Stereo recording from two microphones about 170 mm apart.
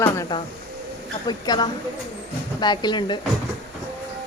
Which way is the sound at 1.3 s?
25° left (ahead or behind).